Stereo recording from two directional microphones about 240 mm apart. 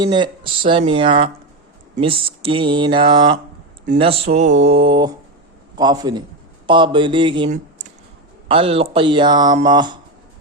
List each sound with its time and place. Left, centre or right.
0.0 s a man's voice: centre
8.4 s speech: right